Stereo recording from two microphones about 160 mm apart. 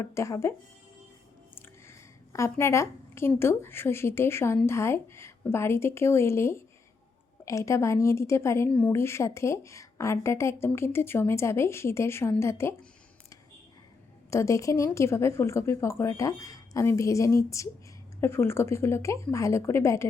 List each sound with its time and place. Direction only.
0.0 s speech: 20° left (ahead or behind)
1.5 s a woman's voice: 20° left (ahead or behind)
14.3 s a woman's voice: 20° left (ahead or behind)